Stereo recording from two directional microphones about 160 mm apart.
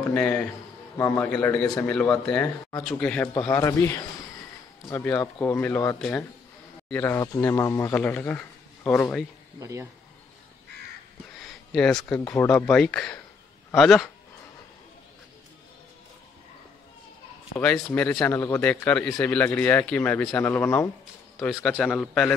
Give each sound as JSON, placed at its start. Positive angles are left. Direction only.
{"t": 0.0, "sound": "a man's voice", "side_deg": 10}
{"t": 3.3, "sound": "a man's voice", "side_deg": 20}
{"t": 9.6, "sound": "speech", "side_deg": -20}
{"t": 11.4, "sound": "speech", "side_deg": 0}
{"t": 17.9, "sound": "a man's voice", "side_deg": 10}
{"t": 21.6, "sound": "speech", "side_deg": 5}